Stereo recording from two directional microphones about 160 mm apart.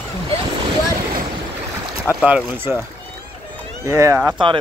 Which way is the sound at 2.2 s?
10° right (ahead or behind).